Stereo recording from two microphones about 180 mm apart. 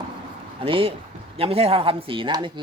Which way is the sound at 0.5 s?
30° right (ahead or behind).